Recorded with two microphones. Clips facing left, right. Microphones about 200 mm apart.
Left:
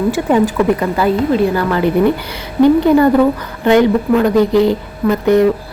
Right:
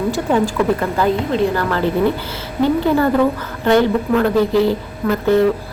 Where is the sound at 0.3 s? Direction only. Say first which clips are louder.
Left 3 dB; 15° left (ahead or behind).